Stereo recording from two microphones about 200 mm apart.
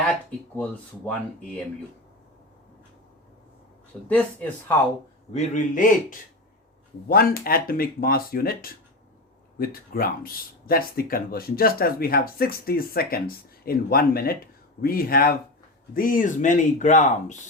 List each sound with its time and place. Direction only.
0.0 s speech: 5° left (ahead or behind)
4.1 s speech: 5° left (ahead or behind)
5.3 s speech: 35° left (ahead or behind)